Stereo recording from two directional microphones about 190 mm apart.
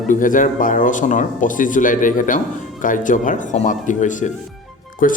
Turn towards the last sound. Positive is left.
turn(degrees=45)  # may be behind; listen again after turning